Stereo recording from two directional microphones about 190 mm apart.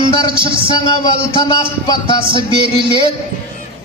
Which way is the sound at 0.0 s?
25° right (ahead or behind).